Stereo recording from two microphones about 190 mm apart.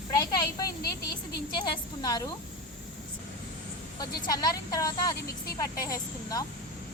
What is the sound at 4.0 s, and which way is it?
Speech, 20° left (ahead or behind).